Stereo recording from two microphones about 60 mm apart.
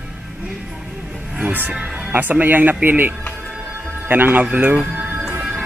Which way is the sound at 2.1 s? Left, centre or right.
Right.